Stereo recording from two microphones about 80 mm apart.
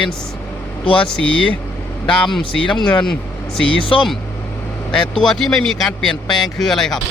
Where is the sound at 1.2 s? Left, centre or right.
Centre.